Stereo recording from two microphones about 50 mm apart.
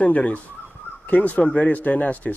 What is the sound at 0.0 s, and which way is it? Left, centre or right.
Speech, left.